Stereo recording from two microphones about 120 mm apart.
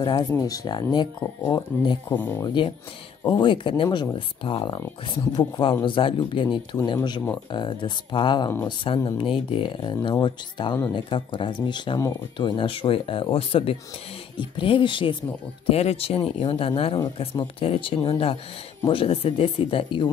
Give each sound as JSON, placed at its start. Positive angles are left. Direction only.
{"t": 0.0, "sound": "speech", "side_deg": 35}
{"t": 2.4, "sound": "speech", "side_deg": 40}
{"t": 15.7, "sound": "speech", "side_deg": 60}